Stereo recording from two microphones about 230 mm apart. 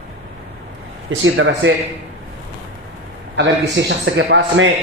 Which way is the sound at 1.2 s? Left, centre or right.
Right.